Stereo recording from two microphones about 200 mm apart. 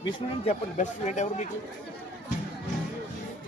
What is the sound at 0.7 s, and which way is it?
Speech, 35° left (ahead or behind).